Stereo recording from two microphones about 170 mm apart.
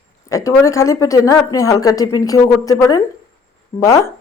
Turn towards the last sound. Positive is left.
turn(degrees=15)  # may be behind; listen again after turning